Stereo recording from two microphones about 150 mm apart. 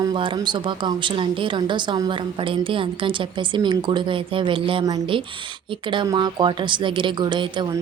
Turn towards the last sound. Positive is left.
turn(degrees=-30)  # may be behind; listen again after turning